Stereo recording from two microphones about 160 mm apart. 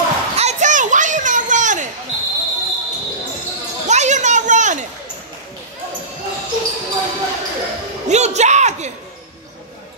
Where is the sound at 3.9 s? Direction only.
45° right (ahead or behind).